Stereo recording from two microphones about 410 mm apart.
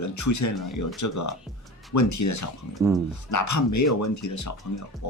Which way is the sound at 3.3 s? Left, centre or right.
Left.